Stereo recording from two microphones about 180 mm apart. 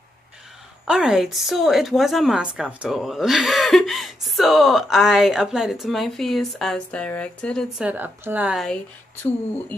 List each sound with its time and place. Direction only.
0.8 s a woman's voice: 5° right (ahead or behind)
7.8 s a woman's voice: 10° right (ahead or behind)